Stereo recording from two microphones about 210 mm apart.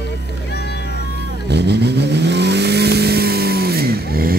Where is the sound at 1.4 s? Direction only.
55° right (ahead or behind).